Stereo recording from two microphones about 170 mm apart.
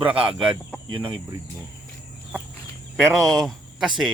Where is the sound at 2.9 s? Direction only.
Centre (ahead or behind).